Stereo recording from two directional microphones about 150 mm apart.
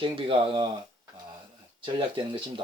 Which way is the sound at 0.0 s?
35° right (ahead or behind).